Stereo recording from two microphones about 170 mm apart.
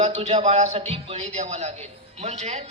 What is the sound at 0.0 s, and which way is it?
A man's voice, 40° right (ahead or behind).